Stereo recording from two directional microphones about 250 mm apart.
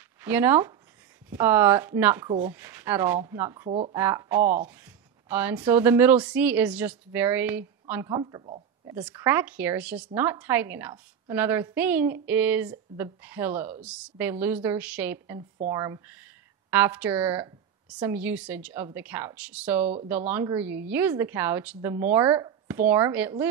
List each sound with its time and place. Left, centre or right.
0.2 s a woman's voice: centre
4.4 s speech: right
5.3 s a woman's voice: centre
8.9 s a woman's voice: centre